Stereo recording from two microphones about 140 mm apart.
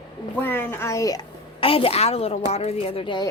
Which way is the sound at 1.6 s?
40° left (ahead or behind).